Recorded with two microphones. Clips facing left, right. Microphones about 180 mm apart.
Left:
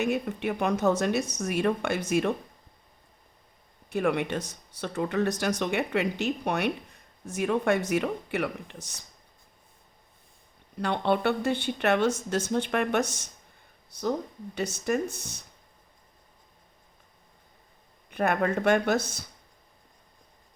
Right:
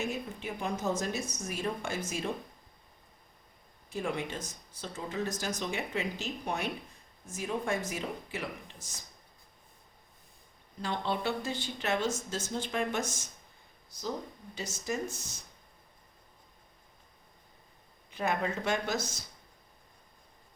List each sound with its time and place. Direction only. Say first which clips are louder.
0.0 s a woman's voice: left 8 dB; 65° left (ahead or behind)
3.8 s speech: left 8 dB; 65° left (ahead or behind)
10.8 s speech: left 7 dB; 65° left (ahead or behind)
18.1 s speech: left 6 dB; 60° left (ahead or behind)